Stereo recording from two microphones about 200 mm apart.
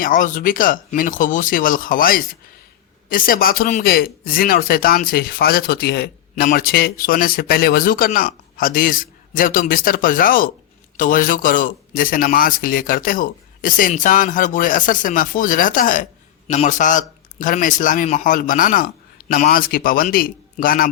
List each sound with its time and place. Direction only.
0.0 s speech: 45° left (ahead or behind)